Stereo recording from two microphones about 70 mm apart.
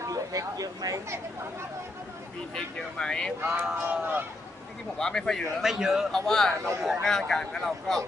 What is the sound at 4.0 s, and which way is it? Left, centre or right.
Speech, right.